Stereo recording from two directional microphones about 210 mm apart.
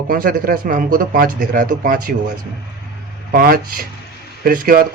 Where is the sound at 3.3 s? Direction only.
45° right (ahead or behind).